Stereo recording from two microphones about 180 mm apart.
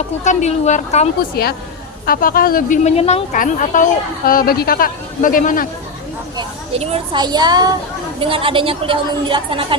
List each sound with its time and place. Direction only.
0.3 s a woman's voice: 40° left (ahead or behind)
1.4 s a woman's voice: 60° left (ahead or behind); by 3.2 s 35° left (ahead or behind)
3.3 s a man's voice: 45° left (ahead or behind)
6.3 s a woman's voice: 30° right (ahead or behind)